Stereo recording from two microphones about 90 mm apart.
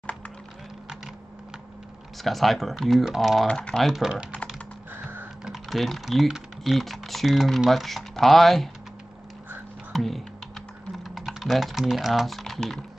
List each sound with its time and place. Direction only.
2.2 s speech: centre (ahead or behind)
3.4 s speech: 10° left (ahead or behind); by 4.3 s 10° right (ahead or behind)
4.9 s music: 25° right (ahead or behind)
5.4 s speech: centre (ahead or behind)
9.9 s speech: centre (ahead or behind)